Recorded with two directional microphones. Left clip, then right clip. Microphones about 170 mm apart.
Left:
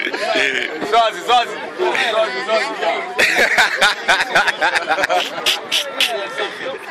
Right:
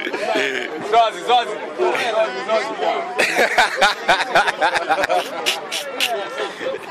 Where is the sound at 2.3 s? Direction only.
10° left (ahead or behind).